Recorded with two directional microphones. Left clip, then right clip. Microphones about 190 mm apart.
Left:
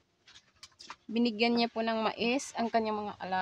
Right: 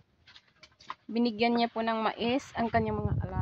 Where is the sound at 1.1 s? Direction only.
5° left (ahead or behind).